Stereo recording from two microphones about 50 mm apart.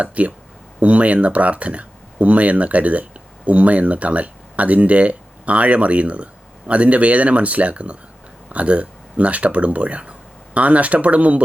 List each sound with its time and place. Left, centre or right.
0.0 s speech: right